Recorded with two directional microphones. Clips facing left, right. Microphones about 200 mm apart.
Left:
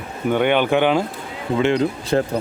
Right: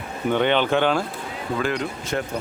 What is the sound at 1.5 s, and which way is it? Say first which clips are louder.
Speech: left 8 dB; 25° left (ahead or behind).